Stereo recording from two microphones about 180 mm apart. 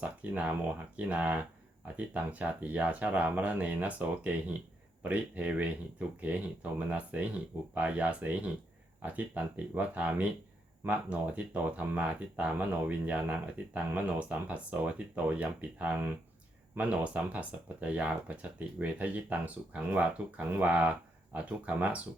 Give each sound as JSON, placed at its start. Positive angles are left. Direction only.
{"t": 0.0, "sound": "speech", "side_deg": -10}